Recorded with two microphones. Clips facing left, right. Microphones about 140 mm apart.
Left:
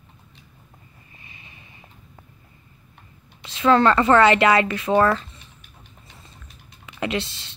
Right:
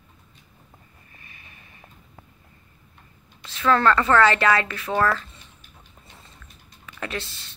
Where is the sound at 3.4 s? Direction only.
20° left (ahead or behind).